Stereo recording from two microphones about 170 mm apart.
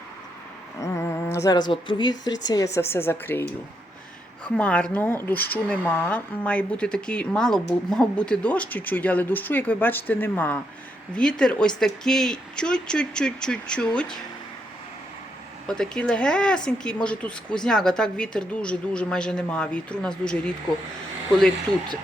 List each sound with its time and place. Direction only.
0.8 s speech: 20° left (ahead or behind)
15.6 s speech: 5° left (ahead or behind)